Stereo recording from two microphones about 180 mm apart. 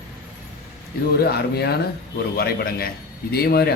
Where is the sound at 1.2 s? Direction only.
60° left (ahead or behind).